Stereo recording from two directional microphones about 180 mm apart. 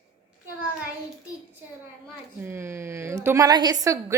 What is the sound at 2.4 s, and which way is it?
Speech, 15° right (ahead or behind).